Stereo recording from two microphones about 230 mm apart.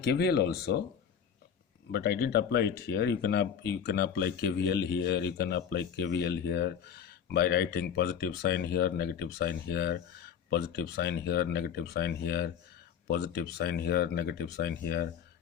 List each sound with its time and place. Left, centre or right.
0.0 s speech: left
1.9 s speech: left